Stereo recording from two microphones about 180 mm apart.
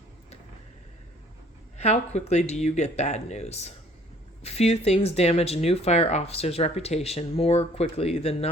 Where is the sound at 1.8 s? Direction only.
40° left (ahead or behind).